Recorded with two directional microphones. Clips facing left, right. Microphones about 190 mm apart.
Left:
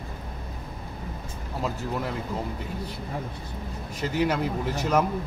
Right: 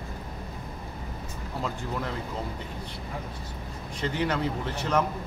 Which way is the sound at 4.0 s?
5° left (ahead or behind).